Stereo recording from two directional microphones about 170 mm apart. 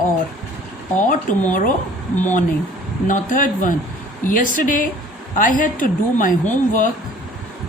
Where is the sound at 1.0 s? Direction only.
50° left (ahead or behind).